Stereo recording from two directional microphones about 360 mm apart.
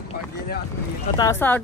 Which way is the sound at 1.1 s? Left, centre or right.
Centre.